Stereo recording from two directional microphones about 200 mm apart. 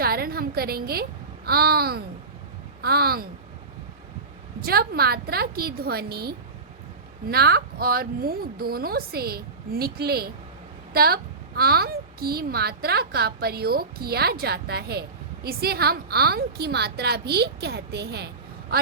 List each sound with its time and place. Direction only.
0.0 s a sound: 50° right (ahead or behind)
1.5 s a woman's voice: 50° right (ahead or behind)
4.6 s a woman's voice: 50° right (ahead or behind)